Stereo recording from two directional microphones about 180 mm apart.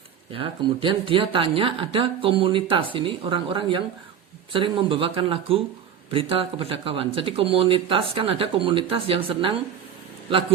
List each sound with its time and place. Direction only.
0.3 s speech: 30° right (ahead or behind)